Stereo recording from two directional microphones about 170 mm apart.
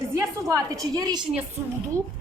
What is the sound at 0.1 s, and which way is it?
A woman's voice, 20° right (ahead or behind).